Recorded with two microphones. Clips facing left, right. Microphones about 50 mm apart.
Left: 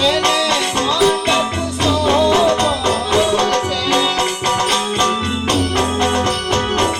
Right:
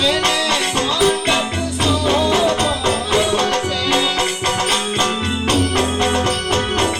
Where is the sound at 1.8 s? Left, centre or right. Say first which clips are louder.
Left 3 dB; centre.